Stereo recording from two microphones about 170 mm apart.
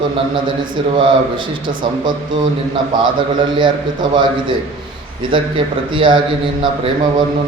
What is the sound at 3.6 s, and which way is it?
A man's voice, 25° right (ahead or behind).